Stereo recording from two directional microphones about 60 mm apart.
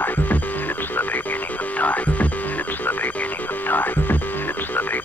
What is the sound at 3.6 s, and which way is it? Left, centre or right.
Music, left.